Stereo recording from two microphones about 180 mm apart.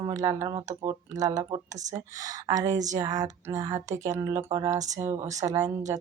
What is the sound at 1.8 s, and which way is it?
Speech, 40° right (ahead or behind).